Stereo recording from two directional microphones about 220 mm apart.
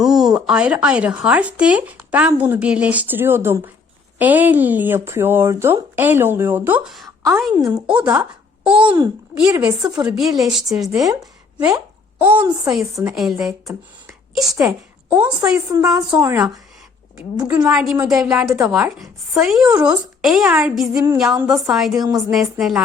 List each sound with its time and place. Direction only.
0.0 s speech: centre (ahead or behind)
7.2 s a woman's voice: 15° right (ahead or behind)
8.8 s a child's voice: 20° right (ahead or behind)
10.1 s speech: centre (ahead or behind)
14.3 s a woman's voice: centre (ahead or behind)
17.6 s speech: 5° right (ahead or behind)